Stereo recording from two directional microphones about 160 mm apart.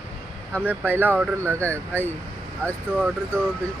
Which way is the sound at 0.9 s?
10° right (ahead or behind).